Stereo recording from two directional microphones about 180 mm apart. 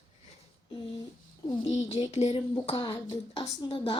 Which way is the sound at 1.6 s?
40° left (ahead or behind).